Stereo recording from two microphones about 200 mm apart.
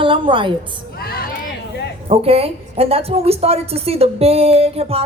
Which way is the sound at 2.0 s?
30° right (ahead or behind).